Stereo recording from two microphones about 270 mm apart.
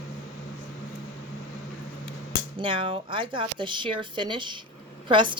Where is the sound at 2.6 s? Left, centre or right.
Centre.